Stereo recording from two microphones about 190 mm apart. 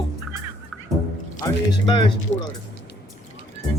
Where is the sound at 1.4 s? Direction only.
20° left (ahead or behind).